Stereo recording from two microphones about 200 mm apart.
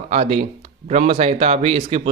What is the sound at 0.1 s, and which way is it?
A man's voice, 30° right (ahead or behind).